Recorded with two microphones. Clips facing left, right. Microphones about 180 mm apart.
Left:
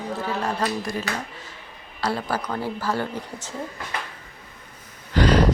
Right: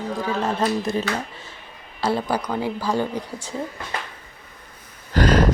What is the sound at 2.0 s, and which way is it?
Speech, 25° right (ahead or behind).